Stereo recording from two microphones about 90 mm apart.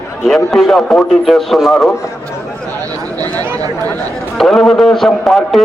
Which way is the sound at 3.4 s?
45° right (ahead or behind).